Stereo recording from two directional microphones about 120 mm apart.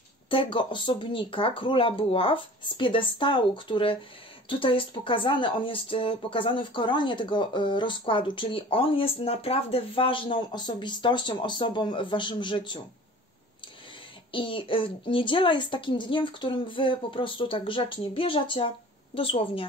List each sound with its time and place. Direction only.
0.3 s speech: 45° left (ahead or behind)
14.3 s speech: 45° left (ahead or behind)